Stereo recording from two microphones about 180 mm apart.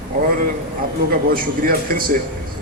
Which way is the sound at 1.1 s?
55° right (ahead or behind).